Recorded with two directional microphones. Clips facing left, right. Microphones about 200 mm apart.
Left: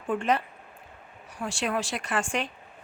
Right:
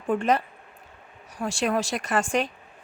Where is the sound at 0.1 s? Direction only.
40° right (ahead or behind).